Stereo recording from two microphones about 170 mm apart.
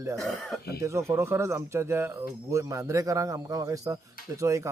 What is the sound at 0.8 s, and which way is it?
Speech, 15° right (ahead or behind).